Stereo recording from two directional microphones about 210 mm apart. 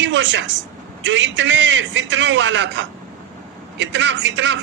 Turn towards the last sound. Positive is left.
turn(degrees=-60)  # may be behind; listen again after turning